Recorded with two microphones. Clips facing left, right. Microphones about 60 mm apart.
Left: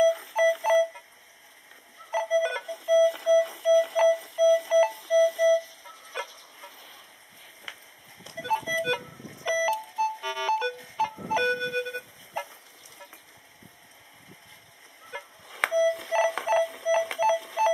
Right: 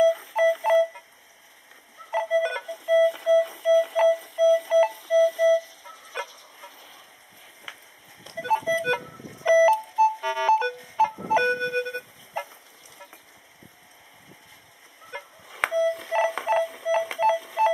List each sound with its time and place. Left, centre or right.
0.0 s alarm clock: centre
2.0 s alarm clock: centre
7.7 s a sound: centre
8.4 s music: centre
9.7 s alarm clock: centre
10.2 s music: centre
15.0 s beep: centre